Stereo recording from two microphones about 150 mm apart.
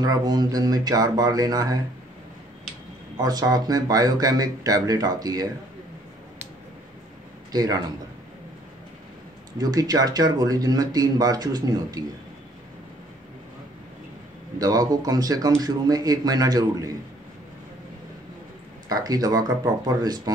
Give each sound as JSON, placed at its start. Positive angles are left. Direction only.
{"t": 0.0, "sound": "speech", "side_deg": -25}
{"t": 3.2, "sound": "speech", "side_deg": -25}
{"t": 7.5, "sound": "speech", "side_deg": -25}
{"t": 9.6, "sound": "speech", "side_deg": -25}
{"t": 14.6, "sound": "speech", "side_deg": -25}
{"t": 18.9, "sound": "speech", "side_deg": -25}